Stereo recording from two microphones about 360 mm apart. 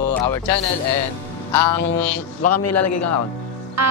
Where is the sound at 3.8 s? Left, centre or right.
Right.